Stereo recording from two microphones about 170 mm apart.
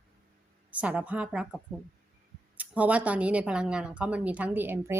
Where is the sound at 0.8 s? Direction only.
10° right (ahead or behind).